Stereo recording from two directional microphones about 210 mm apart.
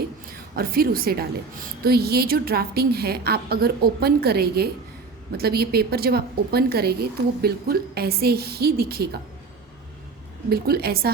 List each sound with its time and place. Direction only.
0.5 s a woman's voice: 45° right (ahead or behind)
10.5 s a woman's voice: 50° right (ahead or behind)